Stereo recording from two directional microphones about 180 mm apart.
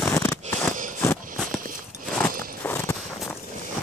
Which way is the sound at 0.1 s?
15° left (ahead or behind).